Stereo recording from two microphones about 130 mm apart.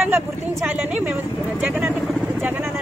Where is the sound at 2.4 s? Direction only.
15° right (ahead or behind).